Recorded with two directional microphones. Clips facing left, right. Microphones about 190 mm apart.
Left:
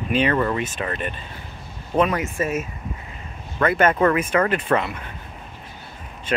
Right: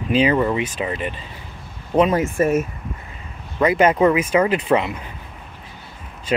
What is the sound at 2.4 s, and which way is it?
Speech, 55° right (ahead or behind).